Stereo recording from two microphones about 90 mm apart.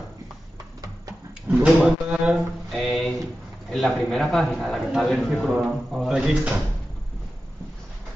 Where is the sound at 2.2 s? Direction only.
5° right (ahead or behind).